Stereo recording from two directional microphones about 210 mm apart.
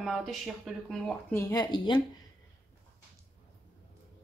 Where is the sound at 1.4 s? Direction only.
20° left (ahead or behind).